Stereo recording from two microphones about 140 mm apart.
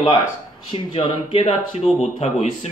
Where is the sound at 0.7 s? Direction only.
50° left (ahead or behind).